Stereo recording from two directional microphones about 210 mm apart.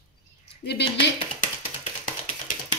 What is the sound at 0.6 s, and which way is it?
Speech, 55° left (ahead or behind).